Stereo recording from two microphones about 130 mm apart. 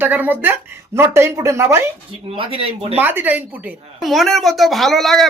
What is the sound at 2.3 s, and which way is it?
Speech, 45° right (ahead or behind).